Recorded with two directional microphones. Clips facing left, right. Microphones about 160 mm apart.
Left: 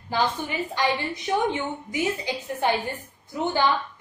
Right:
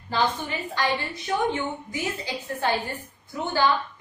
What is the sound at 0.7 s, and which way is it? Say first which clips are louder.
A woman's voice: left 1 dB; 20° left (ahead or behind).